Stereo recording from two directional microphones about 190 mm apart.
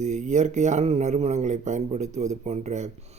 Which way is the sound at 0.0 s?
40° right (ahead or behind).